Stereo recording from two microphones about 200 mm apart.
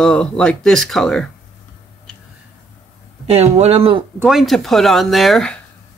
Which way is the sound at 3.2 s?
30° right (ahead or behind).